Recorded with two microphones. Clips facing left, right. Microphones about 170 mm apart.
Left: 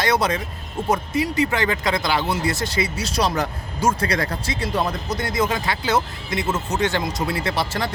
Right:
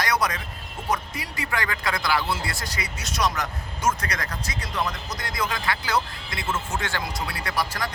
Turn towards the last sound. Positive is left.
turn(degrees=25)  # may be behind; listen again after turning